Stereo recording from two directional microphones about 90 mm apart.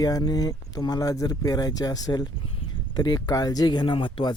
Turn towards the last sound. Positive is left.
turn(degrees=65)  # may be behind; listen again after turning